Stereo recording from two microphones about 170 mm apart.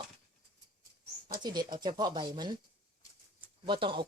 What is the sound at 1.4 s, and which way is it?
Speech, 25° right (ahead or behind).